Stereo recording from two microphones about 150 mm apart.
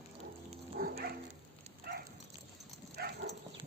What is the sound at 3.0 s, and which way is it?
Dog, 90° right.